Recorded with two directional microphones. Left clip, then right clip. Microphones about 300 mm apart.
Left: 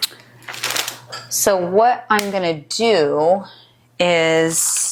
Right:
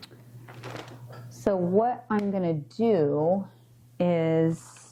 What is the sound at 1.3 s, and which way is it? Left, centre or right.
Speech, centre.